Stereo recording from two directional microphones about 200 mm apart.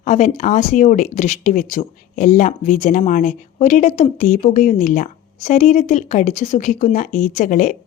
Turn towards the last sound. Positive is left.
turn(degrees=40)  # may be behind; listen again after turning